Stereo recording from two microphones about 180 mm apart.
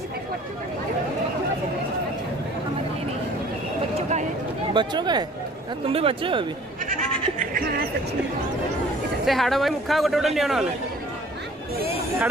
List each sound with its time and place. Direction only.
4.7 s speech: 25° right (ahead or behind)
6.9 s speech: 50° right (ahead or behind)
9.2 s speech: centre (ahead or behind)